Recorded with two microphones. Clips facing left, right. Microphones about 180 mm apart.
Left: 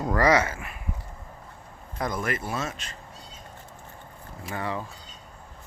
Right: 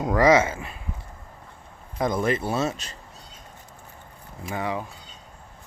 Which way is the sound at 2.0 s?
25° right (ahead or behind).